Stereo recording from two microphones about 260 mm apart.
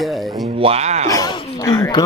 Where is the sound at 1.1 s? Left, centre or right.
Centre.